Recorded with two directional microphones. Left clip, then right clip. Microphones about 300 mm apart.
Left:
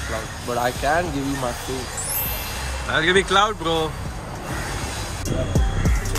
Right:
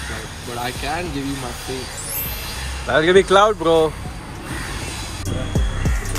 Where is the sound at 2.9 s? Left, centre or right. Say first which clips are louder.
Right 5 dB; centre.